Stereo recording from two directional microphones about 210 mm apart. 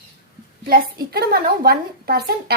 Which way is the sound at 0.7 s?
50° right (ahead or behind).